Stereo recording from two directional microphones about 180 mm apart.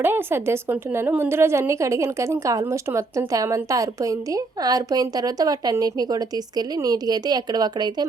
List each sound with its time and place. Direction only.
0.0 s a woman's voice: 10° right (ahead or behind)